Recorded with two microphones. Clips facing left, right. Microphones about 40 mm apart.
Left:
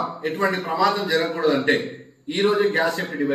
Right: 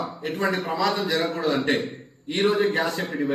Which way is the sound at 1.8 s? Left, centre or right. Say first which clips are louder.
Left 1 dB; left.